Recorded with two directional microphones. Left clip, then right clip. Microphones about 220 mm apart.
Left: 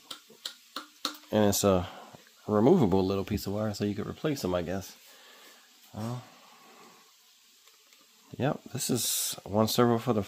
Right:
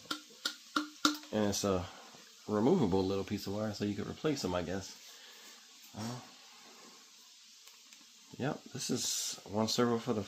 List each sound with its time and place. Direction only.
1.3 s speech: 50° left (ahead or behind)
5.9 s speech: 50° left (ahead or behind)
8.4 s speech: 50° left (ahead or behind)